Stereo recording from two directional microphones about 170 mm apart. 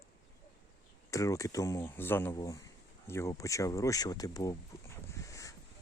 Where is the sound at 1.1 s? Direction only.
20° left (ahead or behind).